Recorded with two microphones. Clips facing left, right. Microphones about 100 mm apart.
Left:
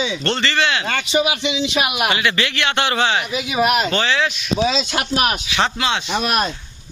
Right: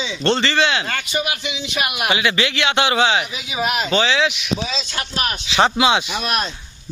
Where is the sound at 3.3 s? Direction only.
10° left (ahead or behind).